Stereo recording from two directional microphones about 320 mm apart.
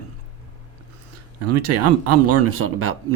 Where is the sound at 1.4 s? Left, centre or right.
Right.